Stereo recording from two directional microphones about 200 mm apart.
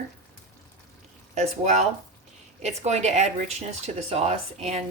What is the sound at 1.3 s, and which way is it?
Speech, 35° right (ahead or behind).